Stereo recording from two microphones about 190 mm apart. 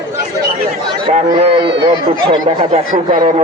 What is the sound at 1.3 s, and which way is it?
Speech, 30° right (ahead or behind).